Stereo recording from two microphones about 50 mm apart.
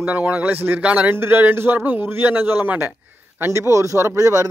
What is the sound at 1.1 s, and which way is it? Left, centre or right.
Speech, right.